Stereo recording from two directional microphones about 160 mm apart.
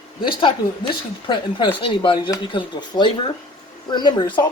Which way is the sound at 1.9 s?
30° left (ahead or behind).